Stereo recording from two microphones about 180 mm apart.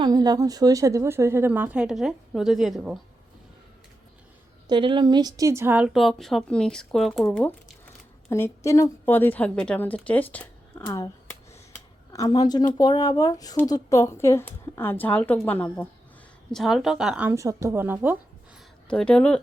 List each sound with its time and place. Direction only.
0.0 s speech: 20° right (ahead or behind); by 3.0 s centre (ahead or behind)
4.7 s speech: 25° right (ahead or behind); by 7.3 s centre (ahead or behind)
8.3 s a woman's voice: 15° left (ahead or behind); by 18.2 s 10° right (ahead or behind)
18.9 s speech: 5° left (ahead or behind)